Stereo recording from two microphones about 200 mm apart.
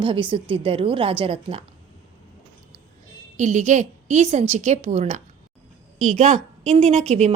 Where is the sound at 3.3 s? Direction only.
35° right (ahead or behind).